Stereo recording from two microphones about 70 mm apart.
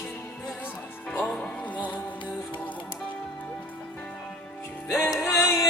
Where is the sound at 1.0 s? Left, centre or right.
Centre.